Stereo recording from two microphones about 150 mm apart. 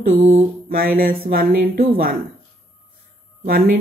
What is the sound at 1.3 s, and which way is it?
Speech, 80° right.